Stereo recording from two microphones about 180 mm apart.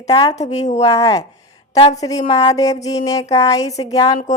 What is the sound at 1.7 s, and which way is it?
Speech, 35° left (ahead or behind).